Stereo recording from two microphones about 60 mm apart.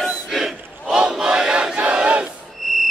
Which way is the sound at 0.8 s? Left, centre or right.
Centre.